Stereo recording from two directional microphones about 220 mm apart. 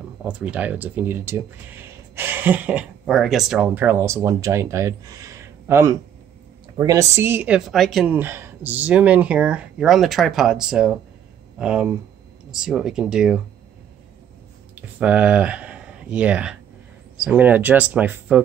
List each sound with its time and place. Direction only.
0.2 s a woman's voice: 5° right (ahead or behind)
14.8 s speech: 5° right (ahead or behind)